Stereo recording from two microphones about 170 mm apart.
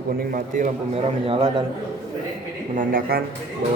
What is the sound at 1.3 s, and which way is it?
Speech, 30° right (ahead or behind).